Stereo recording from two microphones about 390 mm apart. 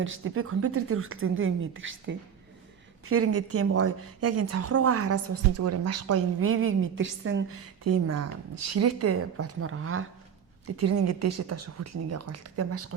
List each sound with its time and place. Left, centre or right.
0.0 s a woman's voice: right
7.9 s a woman's voice: right